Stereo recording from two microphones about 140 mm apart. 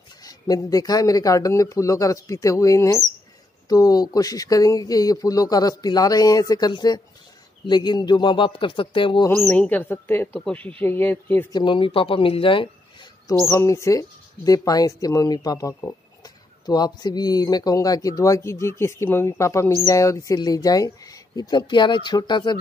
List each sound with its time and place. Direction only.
0.2 s speech: 25° left (ahead or behind)
9.4 s speech: 10° left (ahead or behind)
11.5 s speech: 35° left (ahead or behind)
13.5 s speech: 20° left (ahead or behind)